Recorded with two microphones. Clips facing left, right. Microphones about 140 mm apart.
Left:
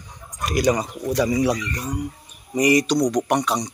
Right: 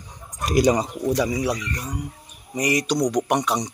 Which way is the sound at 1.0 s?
10° right (ahead or behind).